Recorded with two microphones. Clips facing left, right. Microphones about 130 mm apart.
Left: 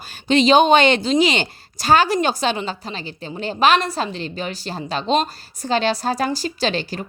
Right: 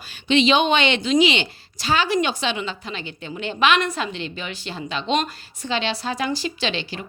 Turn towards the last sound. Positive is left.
turn(degrees=40)  # may be behind; listen again after turning